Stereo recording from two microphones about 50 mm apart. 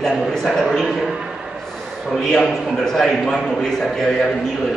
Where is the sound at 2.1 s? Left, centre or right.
Centre.